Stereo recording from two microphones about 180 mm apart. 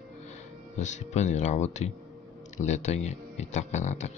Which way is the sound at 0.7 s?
40° left (ahead or behind).